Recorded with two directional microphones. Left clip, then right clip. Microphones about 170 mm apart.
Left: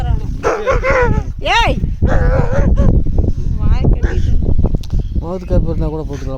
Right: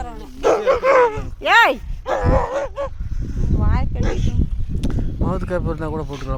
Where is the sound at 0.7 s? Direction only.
10° right (ahead or behind).